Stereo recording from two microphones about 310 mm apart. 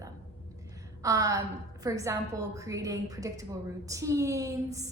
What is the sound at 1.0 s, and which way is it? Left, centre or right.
A woman's voice, centre.